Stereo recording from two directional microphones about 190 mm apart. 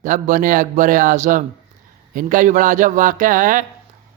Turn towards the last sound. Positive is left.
turn(degrees=-45)  # may be behind; listen again after turning